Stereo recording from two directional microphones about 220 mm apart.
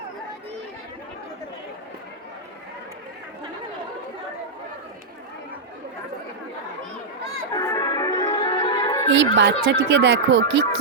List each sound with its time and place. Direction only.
7.5 s music: 15° left (ahead or behind)
9.3 s speech: 50° right (ahead or behind)